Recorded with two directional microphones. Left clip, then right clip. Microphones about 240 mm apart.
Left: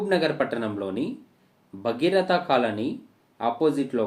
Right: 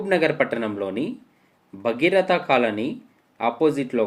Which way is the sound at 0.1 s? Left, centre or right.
Right.